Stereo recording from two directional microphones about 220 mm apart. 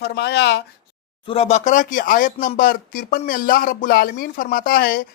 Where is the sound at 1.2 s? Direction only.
30° left (ahead or behind).